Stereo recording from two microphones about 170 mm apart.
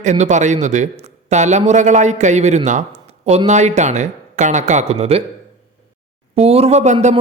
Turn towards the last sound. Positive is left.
turn(degrees=-45)  # may be behind; listen again after turning